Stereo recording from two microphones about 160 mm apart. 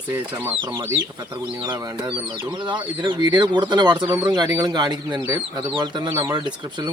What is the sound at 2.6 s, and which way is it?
Speech, 30° right (ahead or behind).